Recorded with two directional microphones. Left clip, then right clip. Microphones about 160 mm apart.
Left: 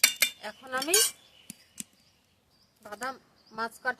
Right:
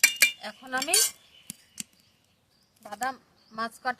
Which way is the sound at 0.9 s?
15° right (ahead or behind).